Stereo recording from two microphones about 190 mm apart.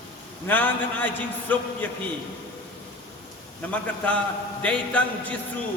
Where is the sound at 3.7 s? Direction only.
10° left (ahead or behind).